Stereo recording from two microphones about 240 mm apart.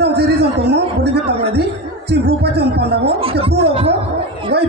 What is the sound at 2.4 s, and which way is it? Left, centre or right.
Speech, right.